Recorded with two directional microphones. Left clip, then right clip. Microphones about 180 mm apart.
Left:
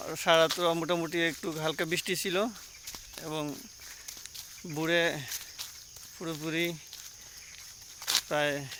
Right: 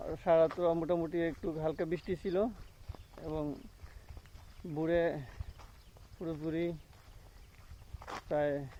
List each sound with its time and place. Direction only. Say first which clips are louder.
0.0 s speech: left 3 dB; 25° left (ahead or behind)
4.8 s speech: left 4 dB; 25° left (ahead or behind)
8.0 s speech: left 5 dB; 25° left (ahead or behind)